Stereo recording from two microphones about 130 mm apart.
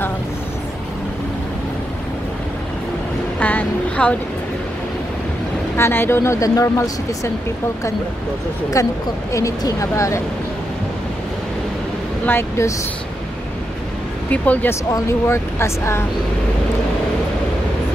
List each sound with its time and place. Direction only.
3.3 s a sound: 10° left (ahead or behind)
5.8 s speech: 20° left (ahead or behind)
8.8 s speech: 25° left (ahead or behind)
12.3 s speech: 20° left (ahead or behind)
14.3 s speech: 10° left (ahead or behind)